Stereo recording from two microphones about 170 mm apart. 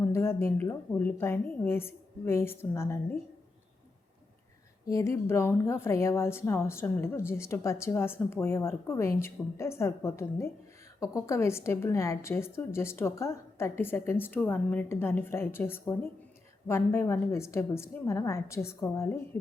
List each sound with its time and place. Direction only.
0.0 s a woman's voice: 15° left (ahead or behind)
4.9 s a woman's voice: 20° left (ahead or behind)